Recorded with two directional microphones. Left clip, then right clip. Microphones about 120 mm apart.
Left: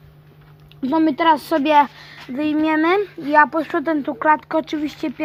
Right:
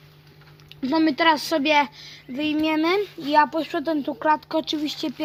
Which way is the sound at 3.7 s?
20° left (ahead or behind).